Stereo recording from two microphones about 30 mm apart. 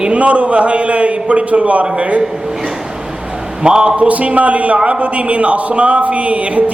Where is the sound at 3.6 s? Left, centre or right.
Right.